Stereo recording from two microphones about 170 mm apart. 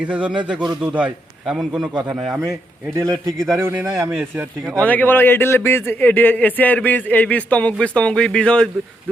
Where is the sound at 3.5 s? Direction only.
15° right (ahead or behind).